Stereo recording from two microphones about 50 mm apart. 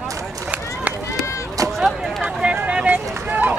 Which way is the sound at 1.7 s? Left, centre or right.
Centre.